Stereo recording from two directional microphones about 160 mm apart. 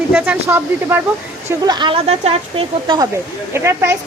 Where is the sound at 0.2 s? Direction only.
10° right (ahead or behind).